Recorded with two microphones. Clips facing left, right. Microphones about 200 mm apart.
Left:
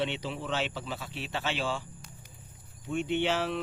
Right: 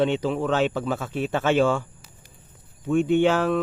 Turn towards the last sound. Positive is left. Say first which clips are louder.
# right 9 dB
turn(degrees=-50)  # may be behind; listen again after turning